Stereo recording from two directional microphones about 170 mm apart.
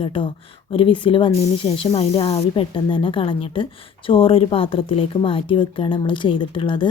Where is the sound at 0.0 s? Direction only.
30° left (ahead or behind).